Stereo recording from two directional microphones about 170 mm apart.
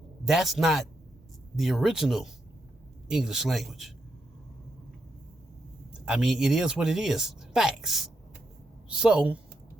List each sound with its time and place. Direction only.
0.3 s speech: centre (ahead or behind)
5.9 s speech: 5° right (ahead or behind)